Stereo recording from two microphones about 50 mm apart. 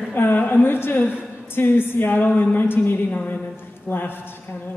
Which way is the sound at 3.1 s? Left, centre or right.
Left.